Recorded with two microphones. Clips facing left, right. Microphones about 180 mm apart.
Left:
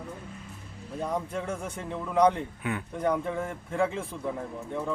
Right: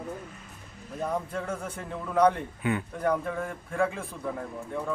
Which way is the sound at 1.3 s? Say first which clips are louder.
Even; 15° left (ahead or behind).